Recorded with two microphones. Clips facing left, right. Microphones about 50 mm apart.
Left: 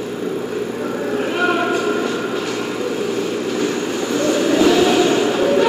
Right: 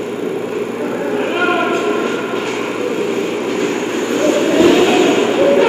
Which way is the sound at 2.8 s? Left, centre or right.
Right.